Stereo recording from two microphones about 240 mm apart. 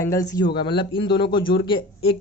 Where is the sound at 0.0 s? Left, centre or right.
Centre.